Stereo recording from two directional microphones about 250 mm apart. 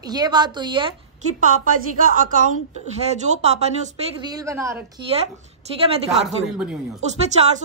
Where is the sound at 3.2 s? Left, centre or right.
Right.